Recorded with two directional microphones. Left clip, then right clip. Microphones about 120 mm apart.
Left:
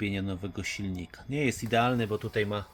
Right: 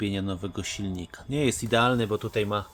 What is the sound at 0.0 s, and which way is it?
Speech, 25° right (ahead or behind).